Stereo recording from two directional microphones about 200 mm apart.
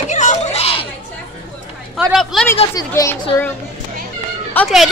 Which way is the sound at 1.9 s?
Centre (ahead or behind).